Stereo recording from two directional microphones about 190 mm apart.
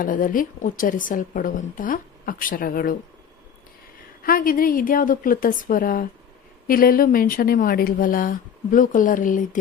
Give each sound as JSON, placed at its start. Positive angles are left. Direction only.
{"t": 0.0, "sound": "a woman's voice", "side_deg": 45}
{"t": 4.2, "sound": "a woman's voice", "side_deg": 50}